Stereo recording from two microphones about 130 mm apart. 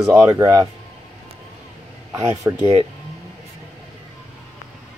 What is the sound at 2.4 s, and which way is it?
Speech, 15° right (ahead or behind).